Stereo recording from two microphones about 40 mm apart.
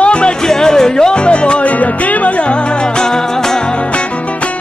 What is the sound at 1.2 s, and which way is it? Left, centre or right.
Music, left.